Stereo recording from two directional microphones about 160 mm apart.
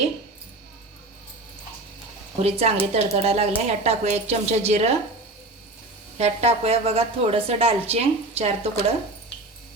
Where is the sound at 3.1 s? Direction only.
40° right (ahead or behind).